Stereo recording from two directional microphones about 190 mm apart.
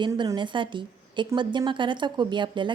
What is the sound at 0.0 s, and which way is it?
A woman's voice, 20° right (ahead or behind).